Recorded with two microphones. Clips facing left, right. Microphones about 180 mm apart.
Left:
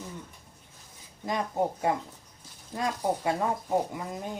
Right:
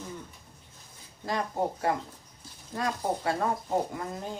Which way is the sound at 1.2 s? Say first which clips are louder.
Left 1 dB; 15° left (ahead or behind).